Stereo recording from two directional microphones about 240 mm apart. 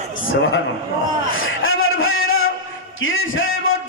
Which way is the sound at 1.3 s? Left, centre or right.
Left.